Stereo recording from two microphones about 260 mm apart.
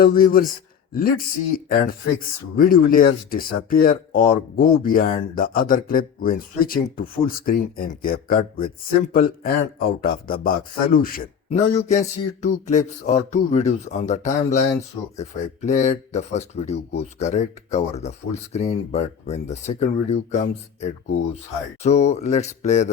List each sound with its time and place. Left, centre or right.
0.0 s a man's voice: left
21.8 s a man's voice: left